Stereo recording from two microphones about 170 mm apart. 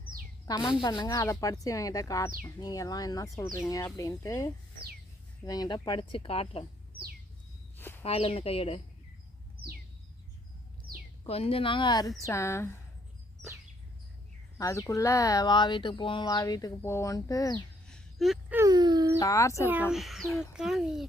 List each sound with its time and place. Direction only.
0.7 s speech: 25° left (ahead or behind)
7.8 s a sound: 10° left (ahead or behind)
8.0 s speech: 35° left (ahead or behind)
11.3 s a woman's voice: 35° left (ahead or behind); by 12.7 s 15° left (ahead or behind)
14.6 s speech: 20° left (ahead or behind)
17.8 s a sound: centre (ahead or behind)
18.5 s speech: 20° right (ahead or behind)
19.2 s a woman's voice: 20° left (ahead or behind)
19.6 s speech: 10° right (ahead or behind)